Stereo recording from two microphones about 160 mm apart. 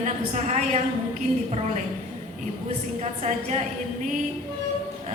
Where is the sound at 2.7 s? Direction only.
45° right (ahead or behind).